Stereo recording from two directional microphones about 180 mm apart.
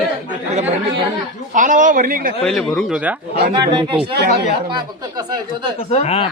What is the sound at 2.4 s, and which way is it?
Speech, 5° left (ahead or behind).